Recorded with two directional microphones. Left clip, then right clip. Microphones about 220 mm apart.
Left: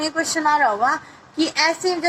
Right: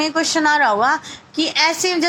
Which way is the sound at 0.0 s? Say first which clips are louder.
Right 3 dB; 20° right (ahead or behind).